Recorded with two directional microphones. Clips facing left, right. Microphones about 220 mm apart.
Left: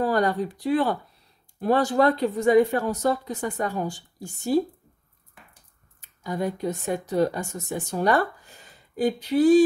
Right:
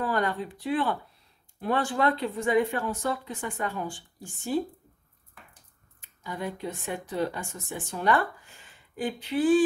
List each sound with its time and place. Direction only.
0.0 s speech: 40° left (ahead or behind)
5.9 s speech: 40° left (ahead or behind)